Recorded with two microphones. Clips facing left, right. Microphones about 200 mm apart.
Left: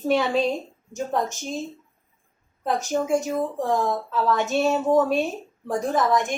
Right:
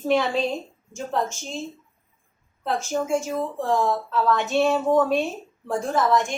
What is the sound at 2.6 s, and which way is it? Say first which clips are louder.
A woman's voice: left 1 dB; 15° left (ahead or behind).